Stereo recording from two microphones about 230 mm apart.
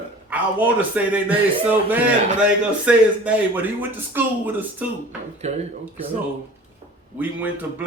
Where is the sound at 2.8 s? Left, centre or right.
Centre.